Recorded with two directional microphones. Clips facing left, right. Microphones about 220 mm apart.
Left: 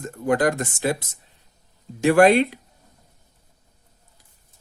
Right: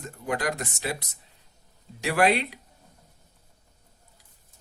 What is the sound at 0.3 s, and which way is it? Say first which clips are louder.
Speech: left 9 dB; 50° left (ahead or behind).